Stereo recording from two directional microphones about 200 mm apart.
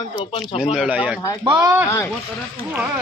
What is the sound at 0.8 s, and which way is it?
Speech, 5° right (ahead or behind).